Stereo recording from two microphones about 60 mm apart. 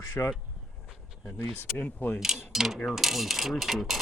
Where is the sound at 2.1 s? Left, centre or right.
Centre.